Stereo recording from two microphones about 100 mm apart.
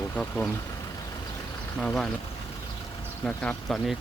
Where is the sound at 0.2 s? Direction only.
20° left (ahead or behind).